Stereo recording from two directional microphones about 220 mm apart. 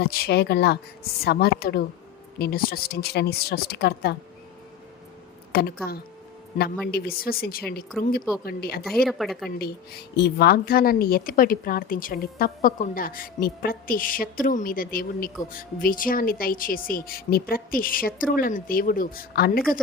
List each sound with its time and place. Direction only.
0.0 s speech: 45° left (ahead or behind)
5.5 s a woman's voice: 45° left (ahead or behind)
9.0 s speech: centre (ahead or behind)
9.6 s a woman's voice: 45° left (ahead or behind)